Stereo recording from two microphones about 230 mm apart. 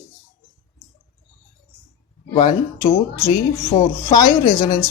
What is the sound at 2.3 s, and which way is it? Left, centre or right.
Speech, centre.